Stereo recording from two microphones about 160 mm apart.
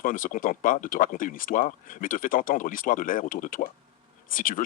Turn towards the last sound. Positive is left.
turn(degrees=55)  # may be behind; listen again after turning